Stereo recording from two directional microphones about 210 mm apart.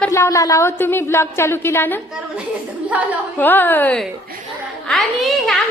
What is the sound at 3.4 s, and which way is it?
A woman's voice, 10° left (ahead or behind).